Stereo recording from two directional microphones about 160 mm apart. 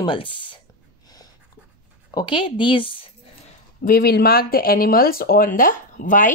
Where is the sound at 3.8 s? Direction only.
65° left (ahead or behind).